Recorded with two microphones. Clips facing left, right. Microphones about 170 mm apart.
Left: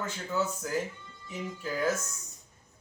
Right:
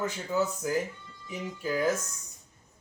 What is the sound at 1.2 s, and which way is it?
Speech, 15° right (ahead or behind).